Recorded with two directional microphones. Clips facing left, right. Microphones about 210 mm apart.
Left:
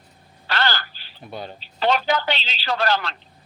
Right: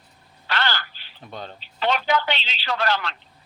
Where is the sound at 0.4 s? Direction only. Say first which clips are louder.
Left 2 dB; 35° left (ahead or behind).